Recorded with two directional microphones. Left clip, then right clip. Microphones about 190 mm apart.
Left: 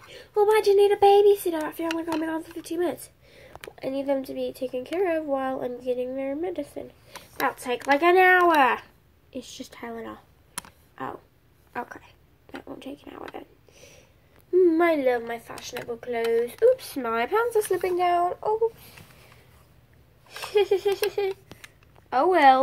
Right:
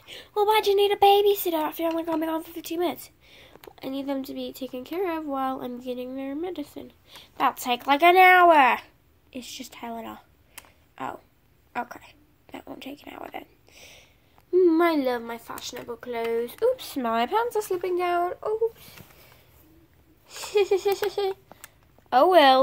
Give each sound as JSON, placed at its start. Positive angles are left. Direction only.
{"t": 0.1, "sound": "speech", "side_deg": -25}
{"t": 4.4, "sound": "speech", "side_deg": -85}
{"t": 4.7, "sound": "speech", "side_deg": -25}
{"t": 11.7, "sound": "a sound", "side_deg": -20}
{"t": 14.5, "sound": "speech", "side_deg": -25}
{"t": 20.2, "sound": "speech", "side_deg": -15}